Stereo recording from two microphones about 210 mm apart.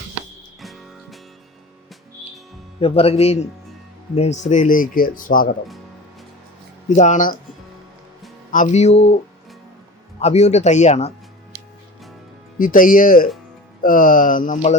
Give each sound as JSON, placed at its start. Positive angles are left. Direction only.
{"t": 0.6, "sound": "music", "side_deg": 0}
{"t": 2.8, "sound": "speech", "side_deg": 30}
{"t": 6.8, "sound": "speech", "side_deg": 35}
{"t": 8.4, "sound": "speech", "side_deg": 35}
{"t": 10.2, "sound": "speech", "side_deg": 30}
{"t": 12.5, "sound": "speech", "side_deg": 40}